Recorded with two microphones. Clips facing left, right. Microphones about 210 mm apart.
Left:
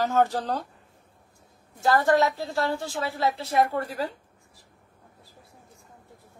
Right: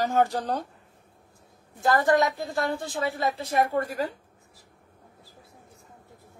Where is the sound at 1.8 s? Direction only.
15° right (ahead or behind).